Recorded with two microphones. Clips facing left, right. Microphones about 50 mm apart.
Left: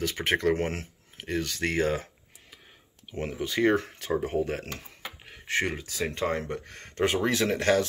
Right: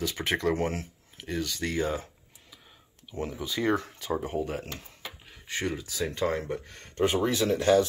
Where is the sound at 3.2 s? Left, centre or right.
Left.